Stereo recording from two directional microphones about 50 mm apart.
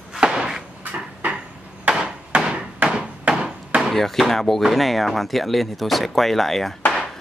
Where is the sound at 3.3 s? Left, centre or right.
Centre.